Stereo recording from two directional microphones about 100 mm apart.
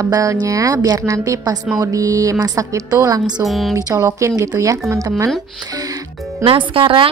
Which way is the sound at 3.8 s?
35° right (ahead or behind).